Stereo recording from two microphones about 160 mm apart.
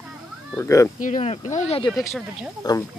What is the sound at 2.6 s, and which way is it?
Speech, 25° left (ahead or behind).